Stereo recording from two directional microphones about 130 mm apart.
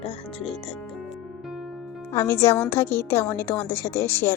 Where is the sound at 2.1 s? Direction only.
20° left (ahead or behind).